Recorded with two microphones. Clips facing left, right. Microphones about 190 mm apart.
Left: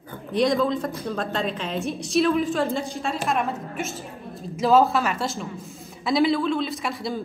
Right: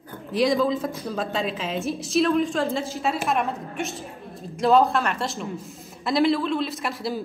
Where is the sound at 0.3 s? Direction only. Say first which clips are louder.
Even; centre (ahead or behind).